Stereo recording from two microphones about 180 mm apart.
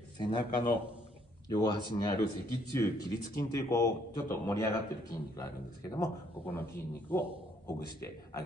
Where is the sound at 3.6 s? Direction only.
20° left (ahead or behind).